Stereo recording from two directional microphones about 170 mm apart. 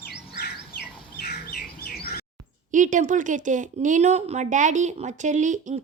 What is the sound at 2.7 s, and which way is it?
A woman's voice, 50° right (ahead or behind).